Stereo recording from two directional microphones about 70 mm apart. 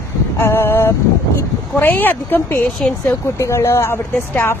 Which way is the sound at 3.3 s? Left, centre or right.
Left.